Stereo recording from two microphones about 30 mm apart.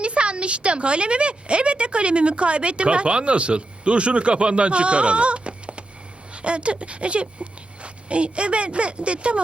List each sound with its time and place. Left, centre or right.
0.0 s a woman's voice: right